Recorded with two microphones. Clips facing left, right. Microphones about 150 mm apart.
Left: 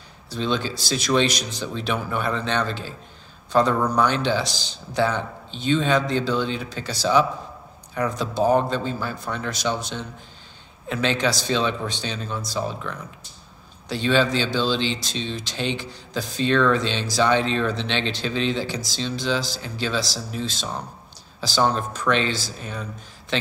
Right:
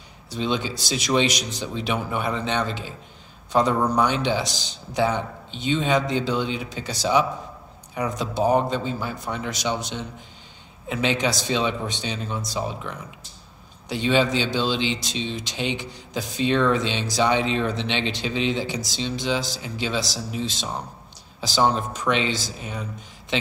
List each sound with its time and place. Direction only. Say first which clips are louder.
0.3 s speech: left 1 dB; 15° right (ahead or behind)